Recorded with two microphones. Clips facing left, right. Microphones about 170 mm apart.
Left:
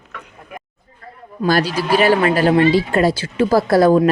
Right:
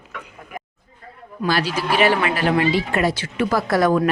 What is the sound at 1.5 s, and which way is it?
Speech, 40° left (ahead or behind).